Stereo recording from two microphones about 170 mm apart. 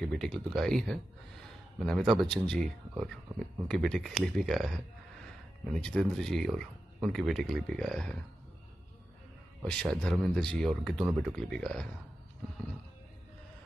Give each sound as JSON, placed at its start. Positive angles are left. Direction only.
{"t": 0.0, "sound": "speech", "side_deg": 5}
{"t": 3.3, "sound": "speech", "side_deg": -20}
{"t": 3.6, "sound": "speech", "side_deg": 0}
{"t": 5.8, "sound": "speech", "side_deg": 5}
{"t": 9.7, "sound": "speech", "side_deg": 5}